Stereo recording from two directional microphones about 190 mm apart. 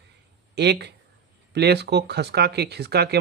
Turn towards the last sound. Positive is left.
turn(degrees=-60)  # may be behind; listen again after turning